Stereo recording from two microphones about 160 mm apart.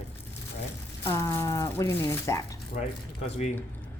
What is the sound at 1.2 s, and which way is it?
A woman's voice, 20° left (ahead or behind).